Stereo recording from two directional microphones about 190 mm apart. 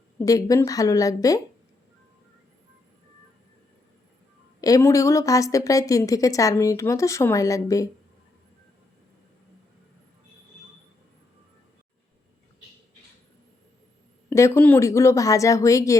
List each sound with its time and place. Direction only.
0.3 s a woman's voice: 15° left (ahead or behind)
4.6 s a woman's voice: 15° left (ahead or behind)
14.3 s a woman's voice: 15° left (ahead or behind)